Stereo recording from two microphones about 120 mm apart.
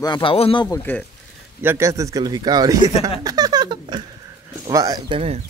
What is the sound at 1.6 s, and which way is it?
Speech, 20° right (ahead or behind).